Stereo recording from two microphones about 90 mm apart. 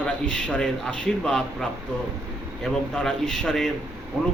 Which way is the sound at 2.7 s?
5° left (ahead or behind).